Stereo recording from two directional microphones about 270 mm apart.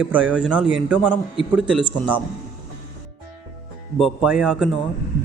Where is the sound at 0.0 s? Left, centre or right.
Centre.